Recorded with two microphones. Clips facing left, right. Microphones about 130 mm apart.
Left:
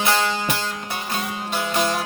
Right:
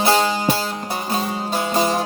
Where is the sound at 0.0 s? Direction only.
35° right (ahead or behind).